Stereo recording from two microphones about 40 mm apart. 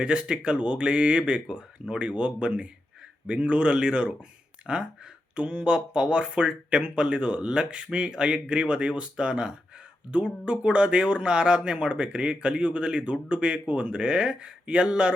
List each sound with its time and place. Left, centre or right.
0.0 s speech: right